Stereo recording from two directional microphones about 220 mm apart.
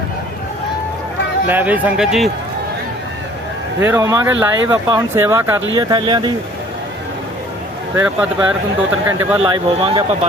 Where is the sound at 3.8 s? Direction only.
10° right (ahead or behind).